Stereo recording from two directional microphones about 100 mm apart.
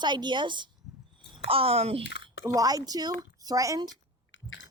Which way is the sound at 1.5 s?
70° right (ahead or behind).